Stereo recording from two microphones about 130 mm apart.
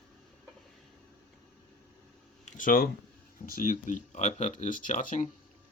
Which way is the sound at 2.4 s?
85° left.